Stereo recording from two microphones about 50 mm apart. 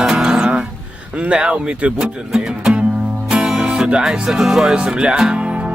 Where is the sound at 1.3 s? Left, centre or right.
Right.